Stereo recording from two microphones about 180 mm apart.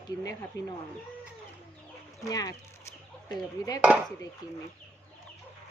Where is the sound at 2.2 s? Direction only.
20° left (ahead or behind).